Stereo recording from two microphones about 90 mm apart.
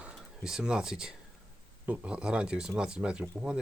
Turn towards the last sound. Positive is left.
turn(degrees=-10)  # may be behind; listen again after turning